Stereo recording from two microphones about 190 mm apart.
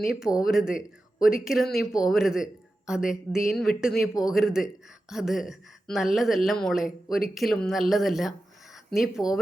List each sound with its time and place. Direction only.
0.2 s speech: 5° right (ahead or behind)